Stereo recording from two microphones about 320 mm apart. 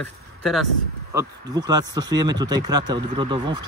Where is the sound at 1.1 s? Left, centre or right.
Centre.